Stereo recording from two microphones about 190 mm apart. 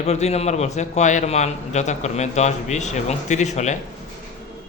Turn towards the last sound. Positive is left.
turn(degrees=40)  # may be behind; listen again after turning